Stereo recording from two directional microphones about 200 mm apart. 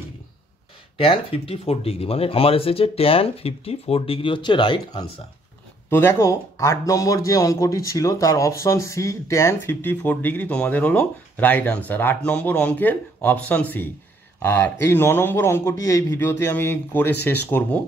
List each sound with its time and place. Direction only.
0.9 s speech: 30° left (ahead or behind); by 17.8 s 10° left (ahead or behind)